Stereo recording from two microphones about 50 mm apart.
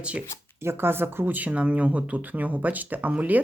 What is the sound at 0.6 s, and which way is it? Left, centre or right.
Speech, right.